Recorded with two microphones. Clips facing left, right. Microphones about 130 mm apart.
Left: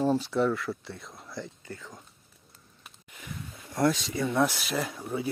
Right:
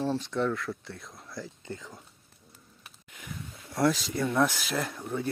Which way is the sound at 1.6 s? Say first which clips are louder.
Right 2 dB; 20° right (ahead or behind).